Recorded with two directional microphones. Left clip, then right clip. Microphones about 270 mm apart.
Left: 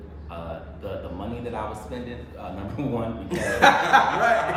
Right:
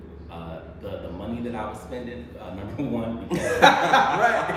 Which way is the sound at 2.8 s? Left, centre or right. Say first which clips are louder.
Even; centre.